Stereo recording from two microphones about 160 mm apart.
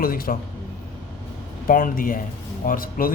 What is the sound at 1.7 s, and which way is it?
A man's voice, 60° left (ahead or behind).